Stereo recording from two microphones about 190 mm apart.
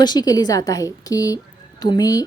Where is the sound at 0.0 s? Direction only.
20° left (ahead or behind).